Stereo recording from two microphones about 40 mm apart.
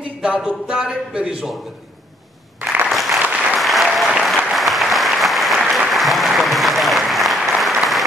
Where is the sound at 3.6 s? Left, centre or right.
Centre.